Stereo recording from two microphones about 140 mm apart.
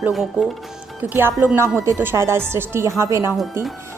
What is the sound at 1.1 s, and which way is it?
A woman's voice, 15° right (ahead or behind).